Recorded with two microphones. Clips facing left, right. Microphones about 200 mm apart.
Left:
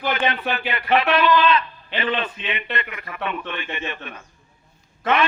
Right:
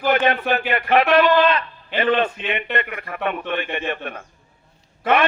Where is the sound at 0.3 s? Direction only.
45° right (ahead or behind).